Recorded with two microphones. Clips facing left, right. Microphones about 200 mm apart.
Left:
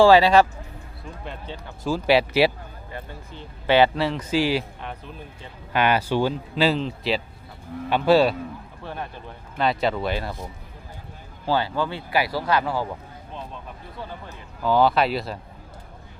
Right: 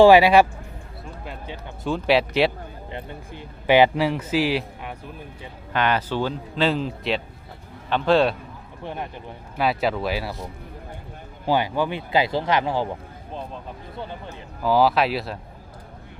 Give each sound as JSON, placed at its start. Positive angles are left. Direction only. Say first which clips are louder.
{"t": 0.0, "sound": "a man's voice", "louder": "right 2 dB", "side_deg": -15}
{"t": 2.9, "sound": "a man's voice", "louder": "right 1 dB", "side_deg": -15}
{"t": 5.7, "sound": "speech", "louder": "left 2 dB", "side_deg": 10}
{"t": 6.7, "sound": "speech", "louder": "even", "side_deg": 0}
{"t": 7.9, "sound": "speech", "louder": "left 1 dB", "side_deg": 10}
{"t": 8.8, "sound": "a man's voice", "louder": "right 3 dB", "side_deg": -20}
{"t": 9.6, "sound": "speech", "louder": "even", "side_deg": -5}
{"t": 11.4, "sound": "speech", "louder": "right 2 dB", "side_deg": -15}
{"t": 14.6, "sound": "speech", "louder": "even", "side_deg": -5}